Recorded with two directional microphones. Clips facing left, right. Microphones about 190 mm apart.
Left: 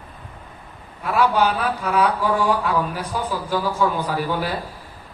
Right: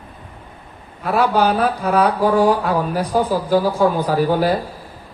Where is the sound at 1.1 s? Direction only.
40° right (ahead or behind).